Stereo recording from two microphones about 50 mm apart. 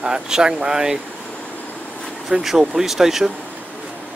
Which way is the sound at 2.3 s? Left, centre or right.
Centre.